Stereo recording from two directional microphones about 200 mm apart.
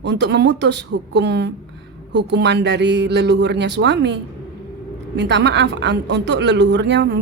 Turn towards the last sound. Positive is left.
turn(degrees=-60)  # may be behind; listen again after turning